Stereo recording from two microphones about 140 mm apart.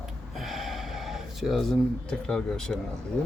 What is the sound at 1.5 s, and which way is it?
Speech, centre (ahead or behind).